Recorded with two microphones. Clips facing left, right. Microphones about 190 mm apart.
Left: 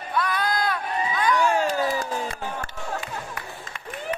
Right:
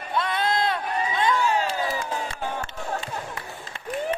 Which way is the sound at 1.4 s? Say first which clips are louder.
Left 2 dB; 50° left (ahead or behind).